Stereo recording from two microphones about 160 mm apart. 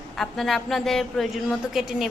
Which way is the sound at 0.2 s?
Centre (ahead or behind).